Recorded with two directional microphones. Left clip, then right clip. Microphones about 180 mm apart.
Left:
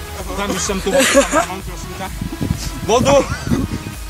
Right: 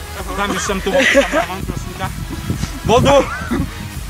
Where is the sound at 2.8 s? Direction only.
Centre (ahead or behind).